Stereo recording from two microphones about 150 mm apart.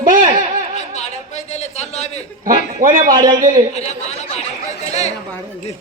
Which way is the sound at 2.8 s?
65° right (ahead or behind).